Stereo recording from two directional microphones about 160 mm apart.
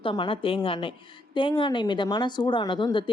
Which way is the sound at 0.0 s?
30° left (ahead or behind).